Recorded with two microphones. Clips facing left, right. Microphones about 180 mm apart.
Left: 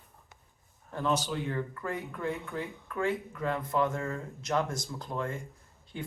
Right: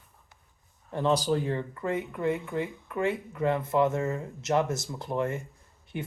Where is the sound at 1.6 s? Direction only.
25° right (ahead or behind).